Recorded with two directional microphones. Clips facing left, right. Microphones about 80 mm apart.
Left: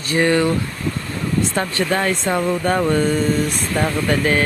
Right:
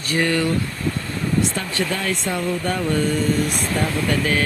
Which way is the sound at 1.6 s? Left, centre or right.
Left.